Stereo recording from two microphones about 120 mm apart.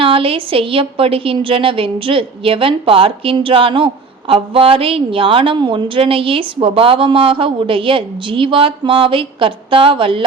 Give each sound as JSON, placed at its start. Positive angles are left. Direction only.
{"t": 0.0, "sound": "a woman's voice", "side_deg": -50}